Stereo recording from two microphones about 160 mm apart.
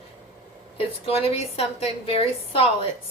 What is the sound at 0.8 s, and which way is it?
A woman's voice, 35° left (ahead or behind).